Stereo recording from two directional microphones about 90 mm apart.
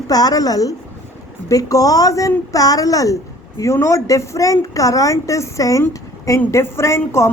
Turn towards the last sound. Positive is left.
turn(degrees=30)  # may be behind; listen again after turning